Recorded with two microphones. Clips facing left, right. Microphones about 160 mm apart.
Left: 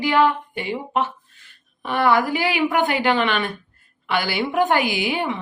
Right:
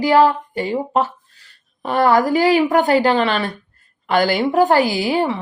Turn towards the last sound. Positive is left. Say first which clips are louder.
# right 5 dB
turn(degrees=-35)  # may be behind; listen again after turning